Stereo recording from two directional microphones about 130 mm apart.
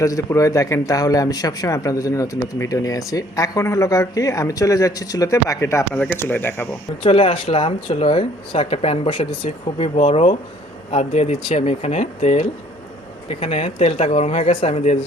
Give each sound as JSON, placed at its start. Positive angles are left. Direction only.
{"t": 0.0, "sound": "speech", "side_deg": 25}
{"t": 7.0, "sound": "speech", "side_deg": 50}